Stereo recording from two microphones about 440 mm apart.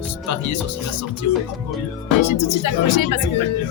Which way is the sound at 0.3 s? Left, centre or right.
Left.